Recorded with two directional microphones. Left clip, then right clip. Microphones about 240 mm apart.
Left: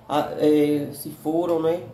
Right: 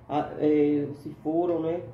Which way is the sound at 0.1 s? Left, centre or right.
Centre.